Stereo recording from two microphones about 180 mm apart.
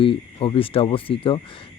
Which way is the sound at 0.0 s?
30° left (ahead or behind).